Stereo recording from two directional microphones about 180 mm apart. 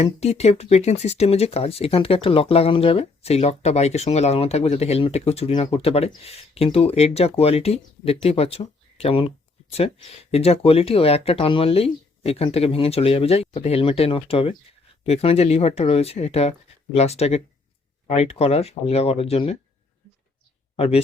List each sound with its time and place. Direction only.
0.0 s speech: 35° left (ahead or behind)
10.3 s speech: 35° left (ahead or behind)
20.7 s speech: 35° left (ahead or behind)